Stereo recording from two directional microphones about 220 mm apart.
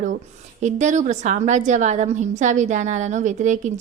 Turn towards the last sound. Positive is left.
turn(degrees=-35)  # may be behind; listen again after turning